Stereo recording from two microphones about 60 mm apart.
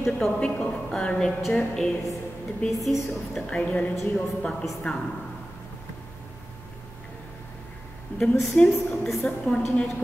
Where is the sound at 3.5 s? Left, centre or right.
Centre.